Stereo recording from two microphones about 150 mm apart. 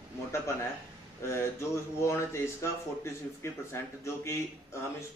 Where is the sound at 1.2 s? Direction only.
15° left (ahead or behind).